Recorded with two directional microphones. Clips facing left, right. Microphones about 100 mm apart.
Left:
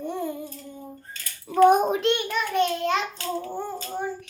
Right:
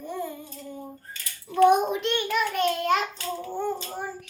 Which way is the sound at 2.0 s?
20° left (ahead or behind).